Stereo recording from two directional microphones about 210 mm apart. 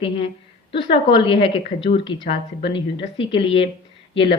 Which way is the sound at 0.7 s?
25° left (ahead or behind).